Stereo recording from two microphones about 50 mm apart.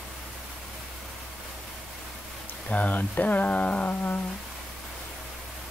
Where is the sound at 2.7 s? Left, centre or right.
Left.